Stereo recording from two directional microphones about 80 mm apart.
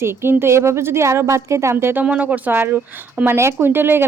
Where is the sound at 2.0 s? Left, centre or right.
Centre.